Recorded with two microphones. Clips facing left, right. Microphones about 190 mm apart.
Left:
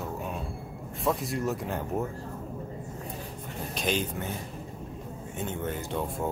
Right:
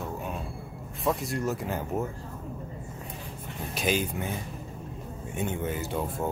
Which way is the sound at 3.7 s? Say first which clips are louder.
Right 2 dB; 5° right (ahead or behind).